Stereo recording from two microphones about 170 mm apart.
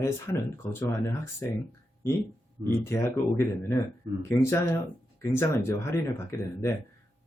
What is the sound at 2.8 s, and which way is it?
Speech, 15° left (ahead or behind).